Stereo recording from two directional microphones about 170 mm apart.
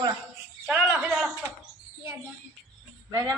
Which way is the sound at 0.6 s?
5° right (ahead or behind).